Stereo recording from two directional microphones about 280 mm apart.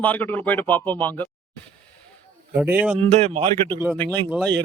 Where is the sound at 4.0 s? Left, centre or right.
Centre.